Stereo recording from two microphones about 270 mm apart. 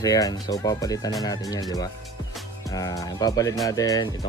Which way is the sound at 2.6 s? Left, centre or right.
Centre.